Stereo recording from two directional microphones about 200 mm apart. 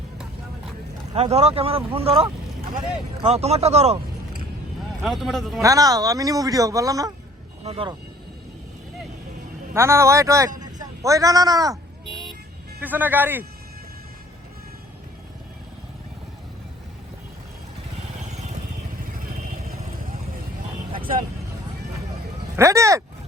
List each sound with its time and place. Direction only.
1.1 s speech: 30° right (ahead or behind)
5.0 s a man's voice: centre (ahead or behind)
5.6 s speech: 15° right (ahead or behind)
7.6 s speech: 30° right (ahead or behind)
9.7 s a man's voice: 15° right (ahead or behind)
12.8 s speech: 10° right (ahead or behind)
19.2 s vehicle: 45° right (ahead or behind)
22.5 s a sound: 15° right (ahead or behind)